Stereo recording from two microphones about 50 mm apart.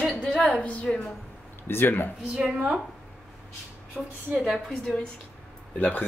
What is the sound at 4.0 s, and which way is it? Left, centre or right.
Speech, centre.